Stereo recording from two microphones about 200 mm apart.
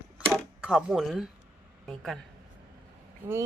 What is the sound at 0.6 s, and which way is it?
Speech, 5° right (ahead or behind).